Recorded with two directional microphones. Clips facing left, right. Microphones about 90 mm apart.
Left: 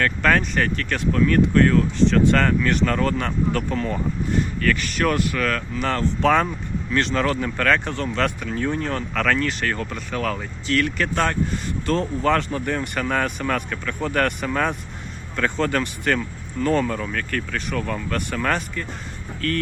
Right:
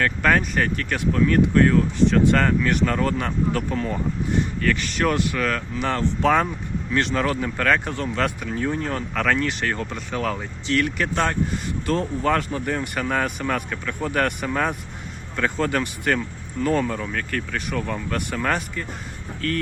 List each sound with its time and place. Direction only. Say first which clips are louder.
0.0 s speech: even; 10° right (ahead or behind)
4.6 s speech: left 1 dB; 20° right (ahead or behind)